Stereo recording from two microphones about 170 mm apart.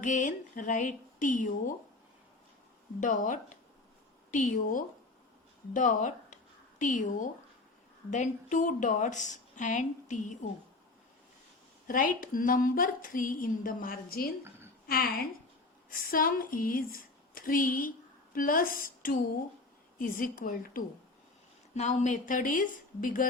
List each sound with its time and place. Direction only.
0.0 s speech: 45° left (ahead or behind)
3.0 s speech: 50° left (ahead or behind)
11.9 s a woman's voice: 55° left (ahead or behind)
21.8 s speech: 45° left (ahead or behind)